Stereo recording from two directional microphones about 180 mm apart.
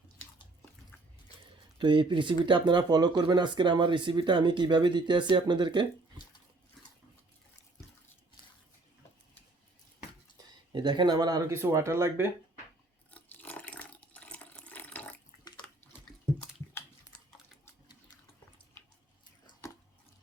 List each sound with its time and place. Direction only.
1.8 s speech: 25° right (ahead or behind)
10.3 s speech: 25° right (ahead or behind)
13.1 s water: 10° left (ahead or behind)
19.6 s a sound: 15° left (ahead or behind)